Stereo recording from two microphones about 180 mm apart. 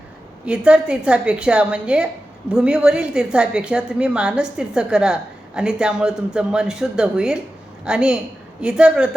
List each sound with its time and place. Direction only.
0.4 s a woman's voice: 5° right (ahead or behind)